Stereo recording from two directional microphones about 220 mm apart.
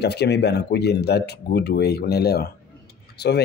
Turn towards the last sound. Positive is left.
turn(degrees=45)  # may be behind; listen again after turning